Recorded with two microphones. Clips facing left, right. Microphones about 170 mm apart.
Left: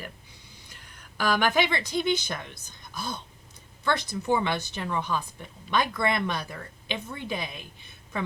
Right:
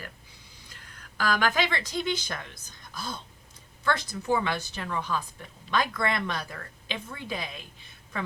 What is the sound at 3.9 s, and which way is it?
A woman's voice, 20° left (ahead or behind).